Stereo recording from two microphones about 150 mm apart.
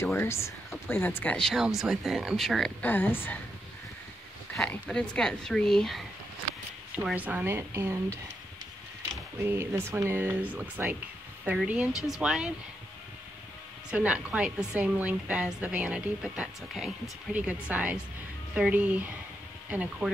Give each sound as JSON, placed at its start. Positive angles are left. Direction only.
{"t": 0.0, "sound": "speech", "side_deg": 15}
{"t": 4.6, "sound": "speech", "side_deg": 5}
{"t": 7.0, "sound": "a woman's voice", "side_deg": -10}
{"t": 9.4, "sound": "a woman's voice", "side_deg": -15}
{"t": 13.8, "sound": "a woman's voice", "side_deg": -10}